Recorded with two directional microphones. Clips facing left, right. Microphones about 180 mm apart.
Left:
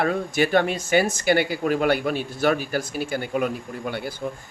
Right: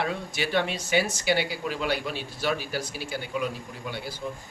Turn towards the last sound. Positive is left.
turn(degrees=55)  # may be behind; listen again after turning